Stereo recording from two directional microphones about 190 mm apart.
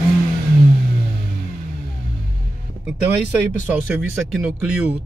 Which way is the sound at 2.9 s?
10° right (ahead or behind).